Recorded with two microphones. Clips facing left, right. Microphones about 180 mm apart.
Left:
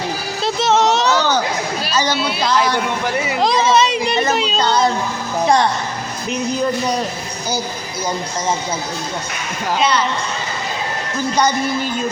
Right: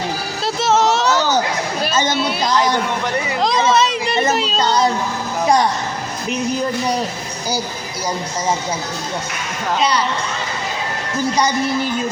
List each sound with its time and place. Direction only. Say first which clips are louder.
0.4 s a sound: left 1 dB; 5° right (ahead or behind)
2.4 s speech: left 1 dB; 20° right (ahead or behind)
3.4 s speech: left 1 dB; centre (ahead or behind)